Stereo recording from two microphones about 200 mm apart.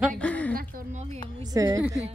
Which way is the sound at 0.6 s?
40° right (ahead or behind).